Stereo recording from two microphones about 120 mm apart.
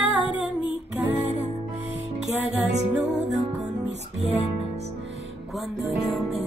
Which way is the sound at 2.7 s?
70° right (ahead or behind).